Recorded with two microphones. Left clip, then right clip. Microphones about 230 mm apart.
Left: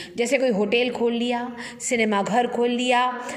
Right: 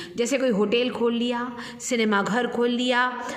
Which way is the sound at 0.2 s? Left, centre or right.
Centre.